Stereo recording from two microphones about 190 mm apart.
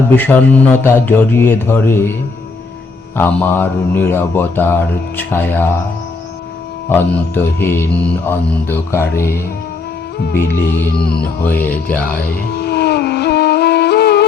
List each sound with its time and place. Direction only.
0.2 s speech: 10° left (ahead or behind)
3.2 s speech: 10° left (ahead or behind)
6.8 s speech: 10° left (ahead or behind)
10.2 s music: 55° left (ahead or behind)
11.4 s speech: 10° left (ahead or behind)
12.5 s music: 60° left (ahead or behind)